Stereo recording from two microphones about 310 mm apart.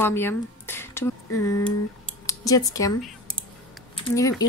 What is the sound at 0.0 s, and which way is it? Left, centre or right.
Speech, centre.